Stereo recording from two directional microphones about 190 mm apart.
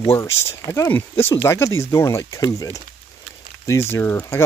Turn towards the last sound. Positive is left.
turn(degrees=15)  # may be behind; listen again after turning